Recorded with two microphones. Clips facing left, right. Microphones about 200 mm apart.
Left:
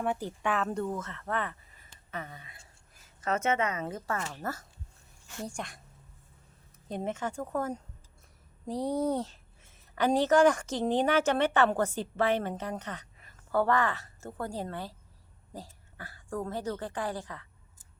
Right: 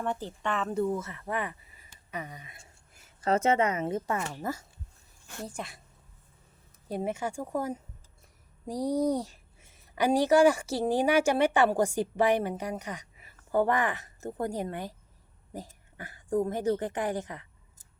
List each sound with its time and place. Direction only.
0.0 s speech: 10° left (ahead or behind); by 3.0 s 20° right (ahead or behind)
3.2 s speech: 30° right (ahead or behind); by 4.6 s 15° right (ahead or behind)
5.5 s a woman's voice: 5° right (ahead or behind)
6.8 s a woman's voice: 10° right (ahead or behind)